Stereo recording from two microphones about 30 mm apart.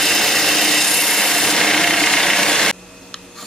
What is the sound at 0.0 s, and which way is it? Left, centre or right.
Tools, centre.